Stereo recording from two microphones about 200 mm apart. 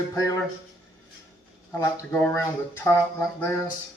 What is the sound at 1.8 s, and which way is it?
Speech, 10° left (ahead or behind).